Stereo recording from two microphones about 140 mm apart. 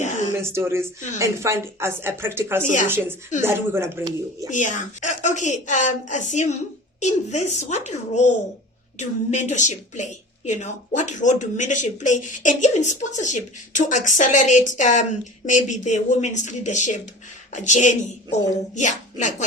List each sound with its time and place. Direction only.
0.0 s a sound: 60° left (ahead or behind)
0.3 s a woman's voice: 20° right (ahead or behind)
4.5 s a woman's voice: 60° left (ahead or behind)